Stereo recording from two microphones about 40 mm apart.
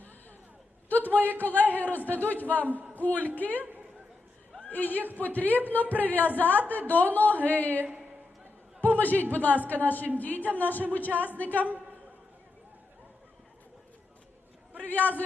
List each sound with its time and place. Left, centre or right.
0.9 s a woman's voice: left
3.6 s a sound: right
4.7 s a woman's voice: left
8.8 s a sound: left
9.3 s a woman's voice: left
14.8 s a woman's voice: left